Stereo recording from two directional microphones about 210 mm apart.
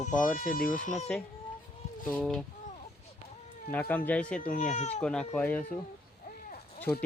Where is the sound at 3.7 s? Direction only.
10° left (ahead or behind).